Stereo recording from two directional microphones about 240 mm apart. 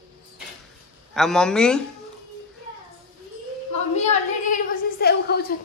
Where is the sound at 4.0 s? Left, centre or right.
Left.